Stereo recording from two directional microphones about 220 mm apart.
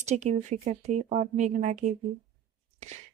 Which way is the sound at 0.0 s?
30° right (ahead or behind).